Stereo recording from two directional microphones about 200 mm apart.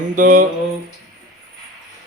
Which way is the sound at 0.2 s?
40° right (ahead or behind).